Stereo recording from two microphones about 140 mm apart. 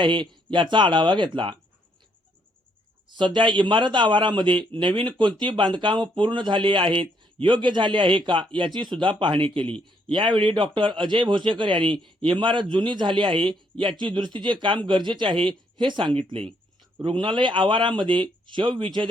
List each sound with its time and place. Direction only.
0.0 s a man's voice: 35° right (ahead or behind)
3.2 s a man's voice: 35° right (ahead or behind)